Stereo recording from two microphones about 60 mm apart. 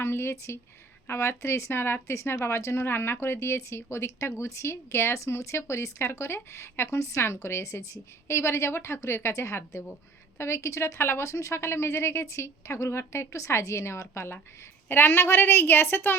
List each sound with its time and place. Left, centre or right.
0.0 s speech: left
2.8 s a woman's voice: left
14.8 s a woman's voice: left